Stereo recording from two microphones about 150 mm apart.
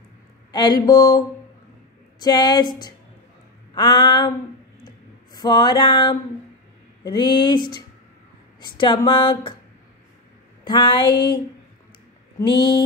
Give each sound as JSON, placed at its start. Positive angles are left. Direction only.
{"t": 0.5, "sound": "speech", "side_deg": 30}
{"t": 4.8, "sound": "a sound", "side_deg": 30}
{"t": 7.0, "sound": "speech", "side_deg": 30}
{"t": 10.6, "sound": "speech", "side_deg": 30}
{"t": 12.4, "sound": "speech", "side_deg": 35}